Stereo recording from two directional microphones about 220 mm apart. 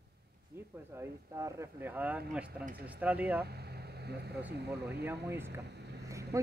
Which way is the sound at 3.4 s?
45° right (ahead or behind).